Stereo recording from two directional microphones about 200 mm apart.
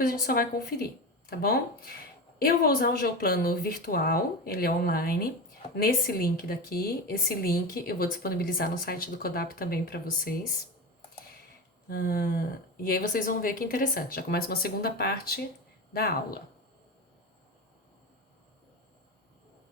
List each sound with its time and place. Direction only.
0.3 s a woman's voice: 50° left (ahead or behind)
11.9 s a woman's voice: 45° left (ahead or behind)